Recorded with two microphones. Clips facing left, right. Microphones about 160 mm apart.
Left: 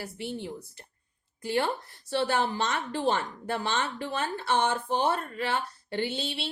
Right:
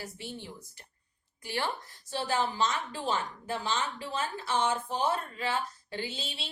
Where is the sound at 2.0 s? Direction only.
65° left (ahead or behind).